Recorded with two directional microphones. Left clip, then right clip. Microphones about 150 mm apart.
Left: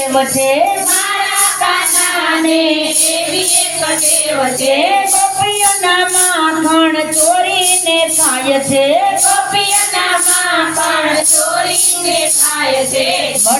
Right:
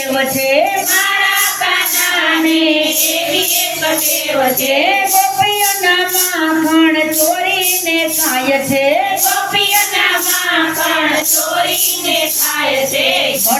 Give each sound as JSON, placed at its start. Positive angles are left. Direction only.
{"t": 6.7, "sound": "speech", "side_deg": 30}